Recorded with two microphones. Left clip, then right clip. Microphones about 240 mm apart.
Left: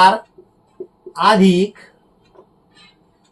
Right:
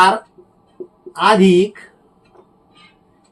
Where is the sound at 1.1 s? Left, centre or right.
Centre.